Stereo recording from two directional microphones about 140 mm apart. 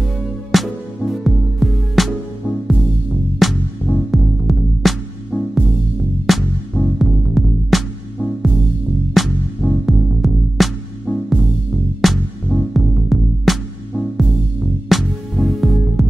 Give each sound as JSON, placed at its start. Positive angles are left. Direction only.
{"t": 0.0, "sound": "music", "side_deg": 0}